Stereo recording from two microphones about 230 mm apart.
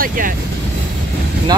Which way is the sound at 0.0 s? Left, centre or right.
Right.